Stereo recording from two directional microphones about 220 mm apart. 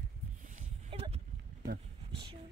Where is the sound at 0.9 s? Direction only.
25° right (ahead or behind).